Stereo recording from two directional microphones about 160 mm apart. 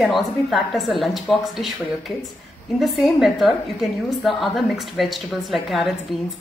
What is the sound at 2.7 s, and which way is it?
A woman's voice, centre (ahead or behind).